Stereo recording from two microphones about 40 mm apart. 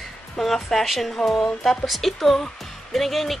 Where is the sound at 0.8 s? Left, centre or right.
Centre.